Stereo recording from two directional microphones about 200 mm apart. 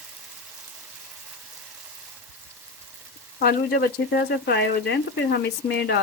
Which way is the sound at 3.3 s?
50° left (ahead or behind).